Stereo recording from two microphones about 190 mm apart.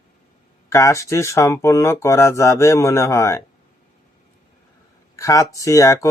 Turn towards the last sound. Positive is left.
turn(degrees=15)  # may be behind; listen again after turning